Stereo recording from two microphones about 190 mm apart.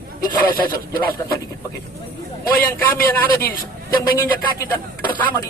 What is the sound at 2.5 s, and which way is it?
Speech, 10° left (ahead or behind).